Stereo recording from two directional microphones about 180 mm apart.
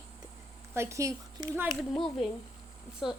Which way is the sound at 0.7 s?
15° right (ahead or behind).